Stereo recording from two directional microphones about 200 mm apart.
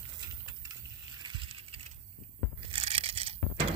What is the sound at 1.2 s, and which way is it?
Vehicle, 25° right (ahead or behind).